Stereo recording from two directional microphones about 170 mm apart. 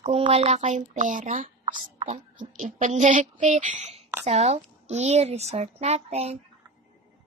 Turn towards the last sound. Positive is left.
turn(degrees=-40)  # may be behind; listen again after turning